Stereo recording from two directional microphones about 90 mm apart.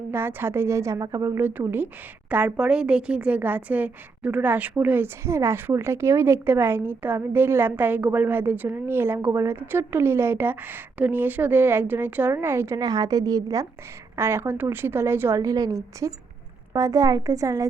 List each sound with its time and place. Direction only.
0.1 s a woman's voice: 25° right (ahead or behind)
1.4 s a woman's voice: 20° right (ahead or behind)
12.7 s a woman's voice: 45° right (ahead or behind)
14.2 s a woman's voice: 30° right (ahead or behind)
15.4 s a woman's voice: 40° right (ahead or behind)